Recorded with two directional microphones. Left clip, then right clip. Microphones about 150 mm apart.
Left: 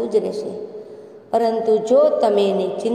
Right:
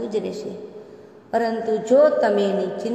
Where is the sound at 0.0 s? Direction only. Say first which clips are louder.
Left 6 dB; 25° left (ahead or behind).